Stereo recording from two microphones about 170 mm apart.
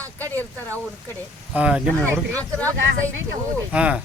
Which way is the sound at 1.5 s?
5° right (ahead or behind).